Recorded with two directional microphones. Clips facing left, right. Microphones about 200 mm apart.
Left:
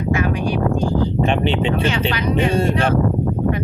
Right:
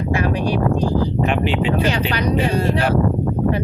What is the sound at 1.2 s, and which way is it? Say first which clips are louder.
Speech: left 1 dB; 25° left (ahead or behind).